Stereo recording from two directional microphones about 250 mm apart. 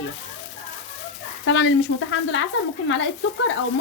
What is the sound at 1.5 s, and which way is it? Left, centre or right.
A woman's voice, left.